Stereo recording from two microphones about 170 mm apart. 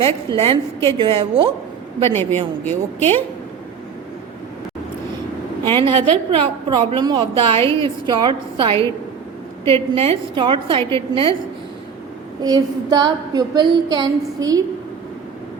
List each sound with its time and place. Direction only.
0.0 s a woman's voice: 30° right (ahead or behind)
2.0 s a woman's voice: 15° left (ahead or behind)
5.7 s a woman's voice: 30° right (ahead or behind)
12.4 s a woman's voice: 25° right (ahead or behind)